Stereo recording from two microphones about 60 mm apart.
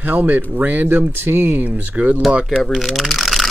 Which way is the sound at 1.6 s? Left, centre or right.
Right.